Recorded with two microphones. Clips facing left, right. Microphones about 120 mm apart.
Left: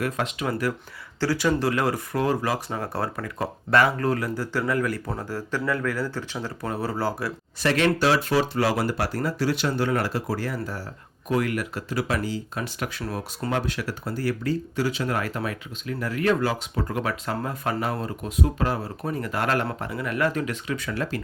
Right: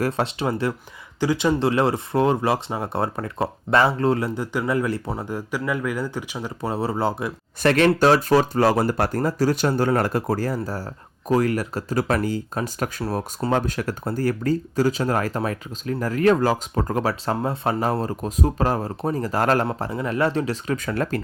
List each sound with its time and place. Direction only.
0.0 s speech: 30° right (ahead or behind)
7.6 s speech: 50° right (ahead or behind)